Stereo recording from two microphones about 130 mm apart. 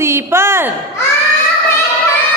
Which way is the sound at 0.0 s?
20° right (ahead or behind).